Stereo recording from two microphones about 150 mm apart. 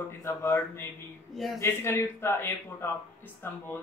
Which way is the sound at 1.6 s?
15° left (ahead or behind).